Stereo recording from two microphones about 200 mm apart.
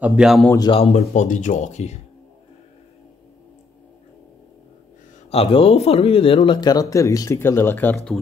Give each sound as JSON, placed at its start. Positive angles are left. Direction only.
{"t": 0.0, "sound": "speech", "side_deg": -5}
{"t": 0.7, "sound": "speech", "side_deg": 30}
{"t": 5.3, "sound": "speech", "side_deg": 30}